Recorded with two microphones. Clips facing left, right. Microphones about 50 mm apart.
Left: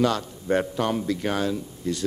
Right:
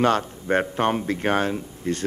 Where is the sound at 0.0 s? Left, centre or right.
Right.